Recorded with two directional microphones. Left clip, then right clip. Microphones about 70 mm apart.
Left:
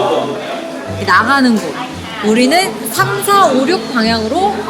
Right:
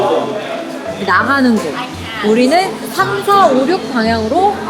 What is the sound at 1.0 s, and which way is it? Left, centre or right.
A woman's voice, left.